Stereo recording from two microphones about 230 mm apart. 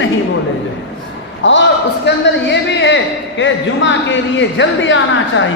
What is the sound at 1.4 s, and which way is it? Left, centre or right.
A man's voice, left.